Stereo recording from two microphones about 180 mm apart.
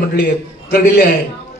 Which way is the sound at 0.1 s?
60° left (ahead or behind).